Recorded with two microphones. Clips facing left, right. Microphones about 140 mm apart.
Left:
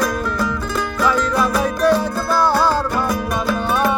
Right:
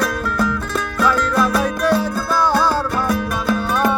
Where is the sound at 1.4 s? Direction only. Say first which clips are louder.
Even; 10° left (ahead or behind).